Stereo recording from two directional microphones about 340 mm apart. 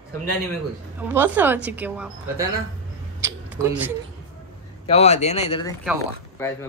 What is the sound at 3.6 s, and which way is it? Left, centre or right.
Speech, centre.